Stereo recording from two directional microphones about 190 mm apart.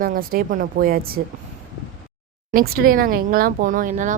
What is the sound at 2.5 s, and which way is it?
Speech, 50° right (ahead or behind).